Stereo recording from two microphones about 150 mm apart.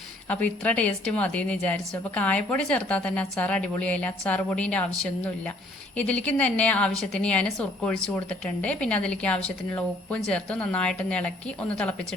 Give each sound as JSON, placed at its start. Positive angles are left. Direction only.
{"t": 0.3, "sound": "a woman's voice", "side_deg": 10}